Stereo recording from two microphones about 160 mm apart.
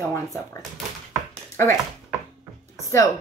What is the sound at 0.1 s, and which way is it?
Speech, 20° left (ahead or behind).